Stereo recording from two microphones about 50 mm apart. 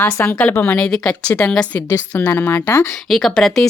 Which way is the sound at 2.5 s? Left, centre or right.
Left.